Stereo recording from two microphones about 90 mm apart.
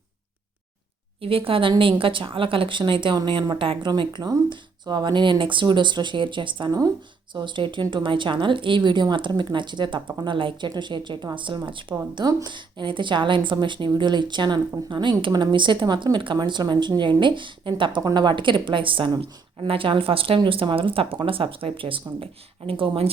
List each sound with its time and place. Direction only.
1.2 s speech: 90° right
1.8 s speech: 75° right (ahead or behind)
3.5 s speech: 90° right
3.8 s speech: 60° right (ahead or behind)
6.7 s speech: 45° right (ahead or behind)
7.3 s speech: 65° right (ahead or behind)
12.1 s speech: 55° right (ahead or behind)
18.0 s speech: 55° right (ahead or behind); by 19.1 s 70° right (ahead or behind)
19.2 s speech: 85° right
22.2 s speech: 90° right